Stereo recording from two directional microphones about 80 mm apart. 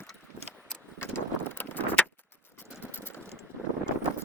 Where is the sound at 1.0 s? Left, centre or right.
Left.